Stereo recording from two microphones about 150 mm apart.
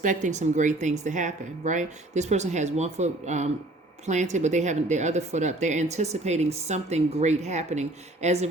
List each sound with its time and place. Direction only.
0.0 s speech: 55° right (ahead or behind)